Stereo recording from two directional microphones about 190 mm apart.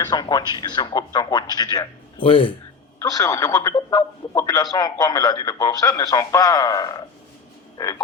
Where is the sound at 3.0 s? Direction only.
15° left (ahead or behind).